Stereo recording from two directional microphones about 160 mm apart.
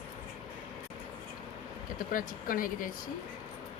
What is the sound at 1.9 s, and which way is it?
Speech, 60° left (ahead or behind).